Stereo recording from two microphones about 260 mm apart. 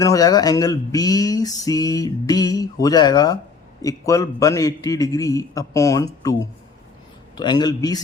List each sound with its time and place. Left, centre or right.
0.0 s a man's voice: centre